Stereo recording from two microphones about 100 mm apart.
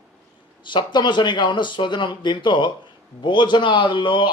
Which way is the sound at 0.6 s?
50° left (ahead or behind).